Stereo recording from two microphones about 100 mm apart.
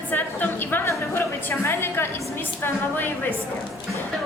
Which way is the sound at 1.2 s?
25° left (ahead or behind).